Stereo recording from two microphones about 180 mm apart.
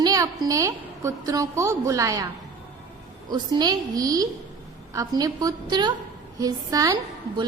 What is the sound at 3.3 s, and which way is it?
A woman's voice, 25° right (ahead or behind).